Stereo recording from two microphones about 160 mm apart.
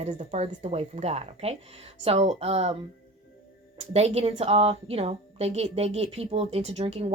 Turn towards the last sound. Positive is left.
turn(degrees=-40)  # may be behind; listen again after turning